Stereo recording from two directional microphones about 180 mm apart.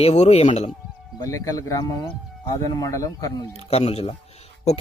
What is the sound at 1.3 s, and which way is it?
Speech, 20° left (ahead or behind).